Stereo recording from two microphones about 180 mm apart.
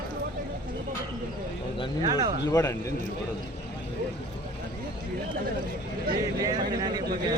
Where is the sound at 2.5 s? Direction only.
20° left (ahead or behind).